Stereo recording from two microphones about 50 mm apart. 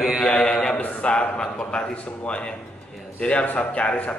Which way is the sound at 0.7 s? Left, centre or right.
Left.